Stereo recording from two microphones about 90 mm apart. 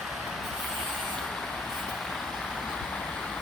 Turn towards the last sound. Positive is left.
turn(degrees=10)  # may be behind; listen again after turning